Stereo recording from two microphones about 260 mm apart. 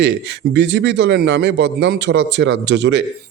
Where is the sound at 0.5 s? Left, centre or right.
Right.